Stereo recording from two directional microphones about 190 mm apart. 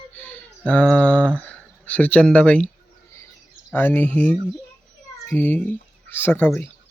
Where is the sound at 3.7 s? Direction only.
10° left (ahead or behind).